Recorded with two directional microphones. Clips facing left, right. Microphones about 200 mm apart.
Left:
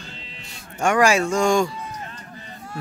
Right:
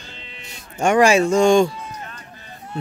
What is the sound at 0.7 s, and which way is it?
Speech, 20° right (ahead or behind).